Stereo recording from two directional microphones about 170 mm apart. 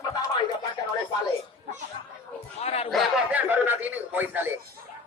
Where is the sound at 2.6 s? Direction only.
35° left (ahead or behind).